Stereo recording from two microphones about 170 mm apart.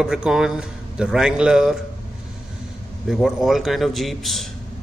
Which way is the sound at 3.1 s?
Centre (ahead or behind).